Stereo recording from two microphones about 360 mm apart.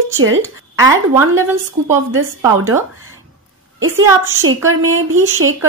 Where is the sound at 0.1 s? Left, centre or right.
Right.